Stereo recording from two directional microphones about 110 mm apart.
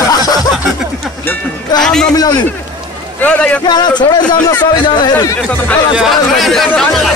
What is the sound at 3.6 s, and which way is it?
A man's voice, 40° left (ahead or behind).